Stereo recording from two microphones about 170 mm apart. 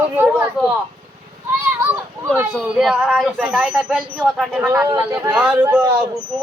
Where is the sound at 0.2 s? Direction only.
10° right (ahead or behind).